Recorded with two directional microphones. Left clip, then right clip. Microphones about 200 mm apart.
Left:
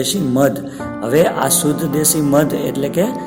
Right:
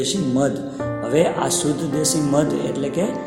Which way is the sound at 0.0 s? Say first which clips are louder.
Left 5 dB; 50° left (ahead or behind).